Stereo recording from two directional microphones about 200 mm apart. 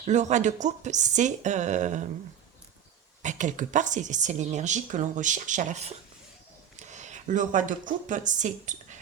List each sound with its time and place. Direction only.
0.0 s a woman's voice: 35° right (ahead or behind)
3.2 s a woman's voice: 40° right (ahead or behind)